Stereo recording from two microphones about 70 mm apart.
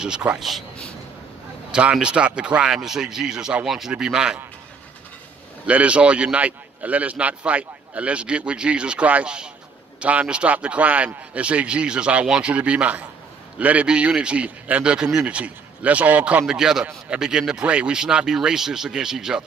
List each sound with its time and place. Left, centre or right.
0.0 s a man's voice: centre
0.4 s speech: centre
1.7 s a man's voice: centre
5.7 s a man's voice: centre
16.4 s a man's voice: centre